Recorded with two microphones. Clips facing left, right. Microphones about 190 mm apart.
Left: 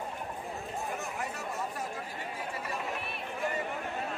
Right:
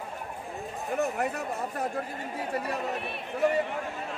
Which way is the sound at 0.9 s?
60° right (ahead or behind).